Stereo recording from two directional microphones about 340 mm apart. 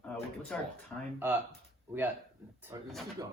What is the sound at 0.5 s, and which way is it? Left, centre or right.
Speech, centre.